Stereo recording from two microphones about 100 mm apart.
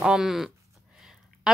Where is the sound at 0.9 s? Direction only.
5° right (ahead or behind).